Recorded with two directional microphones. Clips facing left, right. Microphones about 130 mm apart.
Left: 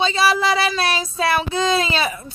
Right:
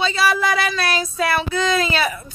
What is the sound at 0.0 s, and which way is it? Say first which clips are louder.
Child singing: left 1 dB; 30° left (ahead or behind).